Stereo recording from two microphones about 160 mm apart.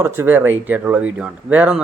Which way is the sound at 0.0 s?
15° right (ahead or behind).